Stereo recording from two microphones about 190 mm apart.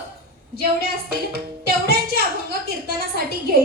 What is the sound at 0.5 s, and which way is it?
Speech, 50° right (ahead or behind).